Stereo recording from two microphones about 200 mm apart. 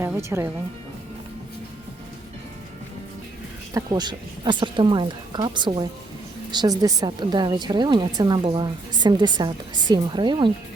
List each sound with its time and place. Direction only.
0.0 s speech: 15° right (ahead or behind)
3.8 s a woman's voice: 20° right (ahead or behind)